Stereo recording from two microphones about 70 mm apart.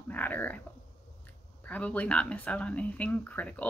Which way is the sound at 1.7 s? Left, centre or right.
Left.